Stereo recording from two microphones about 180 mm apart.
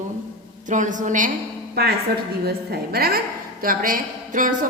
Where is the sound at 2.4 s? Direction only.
60° right (ahead or behind).